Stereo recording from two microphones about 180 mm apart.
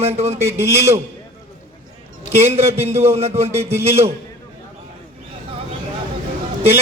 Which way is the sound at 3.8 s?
35° right (ahead or behind).